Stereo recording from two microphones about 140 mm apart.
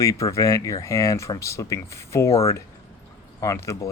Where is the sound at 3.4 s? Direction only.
20° left (ahead or behind).